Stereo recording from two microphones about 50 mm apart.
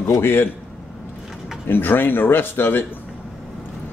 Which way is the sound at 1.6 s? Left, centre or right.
Left.